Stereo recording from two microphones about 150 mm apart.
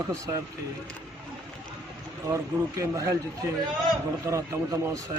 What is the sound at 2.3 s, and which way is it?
Speech, 20° right (ahead or behind).